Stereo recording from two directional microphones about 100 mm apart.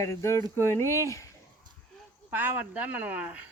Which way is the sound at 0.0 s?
30° left (ahead or behind).